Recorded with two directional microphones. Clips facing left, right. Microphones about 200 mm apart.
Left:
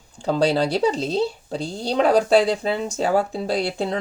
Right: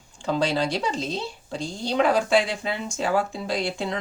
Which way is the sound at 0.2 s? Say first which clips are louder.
Left 4 dB; 40° left (ahead or behind).